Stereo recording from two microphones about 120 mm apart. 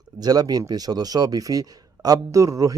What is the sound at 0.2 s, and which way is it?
Speech, 35° right (ahead or behind).